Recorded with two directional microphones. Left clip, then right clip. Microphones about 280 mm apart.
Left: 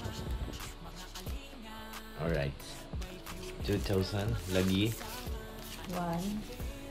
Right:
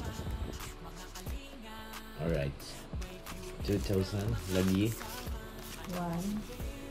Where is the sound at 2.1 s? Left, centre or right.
Centre.